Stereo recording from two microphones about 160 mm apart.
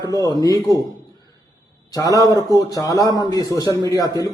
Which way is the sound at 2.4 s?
20° left (ahead or behind).